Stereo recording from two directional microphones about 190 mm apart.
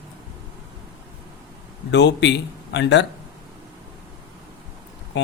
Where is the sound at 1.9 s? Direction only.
70° left (ahead or behind).